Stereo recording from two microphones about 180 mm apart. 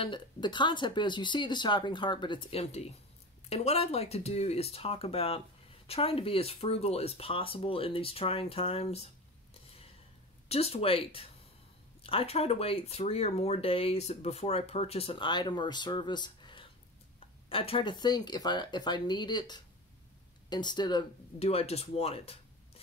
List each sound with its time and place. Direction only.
0.0 s speech: 25° left (ahead or behind)